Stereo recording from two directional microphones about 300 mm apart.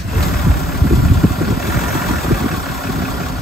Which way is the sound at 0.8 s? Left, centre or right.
Centre.